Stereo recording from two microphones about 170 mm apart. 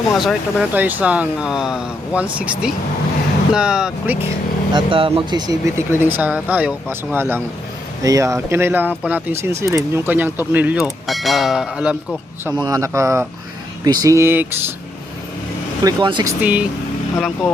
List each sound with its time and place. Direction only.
0.1 s speech: centre (ahead or behind)
4.7 s speech: 30° right (ahead or behind); by 11.9 s 5° right (ahead or behind)
12.6 s speech: 20° right (ahead or behind)
15.8 s speech: 25° right (ahead or behind)
16.4 s speech: 10° right (ahead or behind)
17.2 s speech: 5° left (ahead or behind)